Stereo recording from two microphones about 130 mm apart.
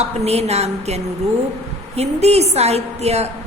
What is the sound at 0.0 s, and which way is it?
A woman's voice, 55° right (ahead or behind).